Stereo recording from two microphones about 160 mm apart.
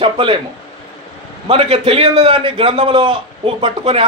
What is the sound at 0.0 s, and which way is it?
Speech, 30° right (ahead or behind).